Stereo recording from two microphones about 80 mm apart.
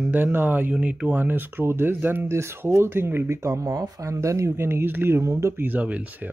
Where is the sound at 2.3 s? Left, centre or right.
Right.